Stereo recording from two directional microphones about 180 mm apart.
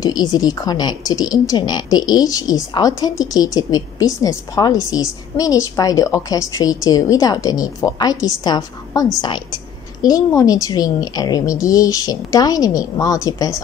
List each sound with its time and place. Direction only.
0.0 s a woman's voice: 20° left (ahead or behind)
10.0 s speech: 20° left (ahead or behind)